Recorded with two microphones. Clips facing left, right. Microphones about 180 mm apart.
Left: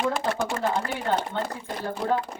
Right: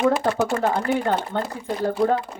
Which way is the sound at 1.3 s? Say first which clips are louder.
Right 4 dB; 50° right (ahead or behind).